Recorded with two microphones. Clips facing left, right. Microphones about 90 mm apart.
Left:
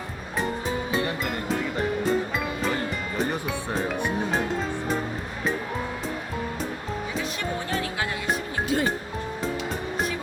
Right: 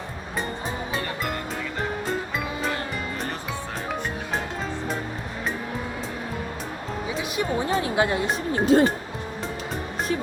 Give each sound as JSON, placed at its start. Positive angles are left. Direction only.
{"t": 7.3, "sound": "speech", "side_deg": -25}